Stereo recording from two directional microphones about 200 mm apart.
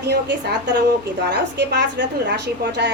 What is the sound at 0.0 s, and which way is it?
A woman's voice, 55° right (ahead or behind).